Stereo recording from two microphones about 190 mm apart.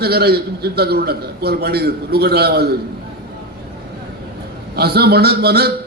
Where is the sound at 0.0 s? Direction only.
55° right (ahead or behind).